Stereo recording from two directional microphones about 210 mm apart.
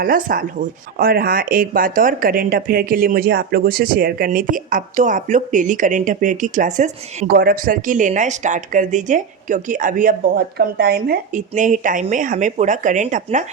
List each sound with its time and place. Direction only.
0.0 s speech: 45° right (ahead or behind)